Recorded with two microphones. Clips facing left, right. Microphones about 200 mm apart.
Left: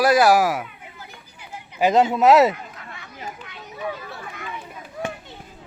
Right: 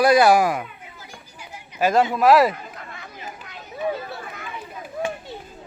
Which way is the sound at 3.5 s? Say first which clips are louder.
Right 6 dB; 40° right (ahead or behind).